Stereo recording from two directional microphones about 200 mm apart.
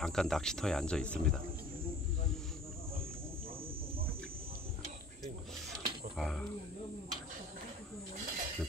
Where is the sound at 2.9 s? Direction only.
45° right (ahead or behind).